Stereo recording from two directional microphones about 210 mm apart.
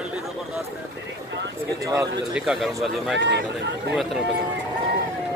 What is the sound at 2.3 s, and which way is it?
Speech, centre (ahead or behind).